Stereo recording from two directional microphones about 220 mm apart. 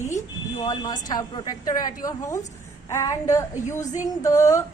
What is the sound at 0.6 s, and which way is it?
Speech, 20° left (ahead or behind).